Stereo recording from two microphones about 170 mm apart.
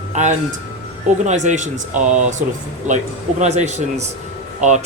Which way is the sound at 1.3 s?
45° right (ahead or behind).